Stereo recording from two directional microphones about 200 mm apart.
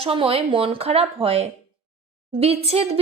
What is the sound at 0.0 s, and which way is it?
A woman's voice, 25° right (ahead or behind).